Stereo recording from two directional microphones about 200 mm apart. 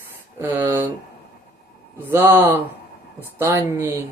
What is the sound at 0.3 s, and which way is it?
Speech, 10° right (ahead or behind).